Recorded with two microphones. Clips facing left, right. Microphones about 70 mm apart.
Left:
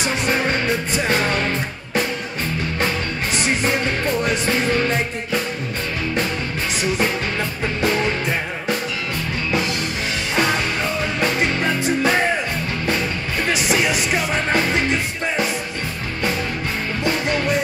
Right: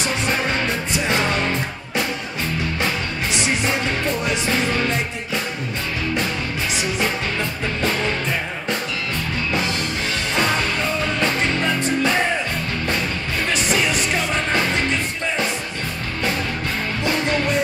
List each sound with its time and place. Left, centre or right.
1.0 s music: centre
11.1 s music: centre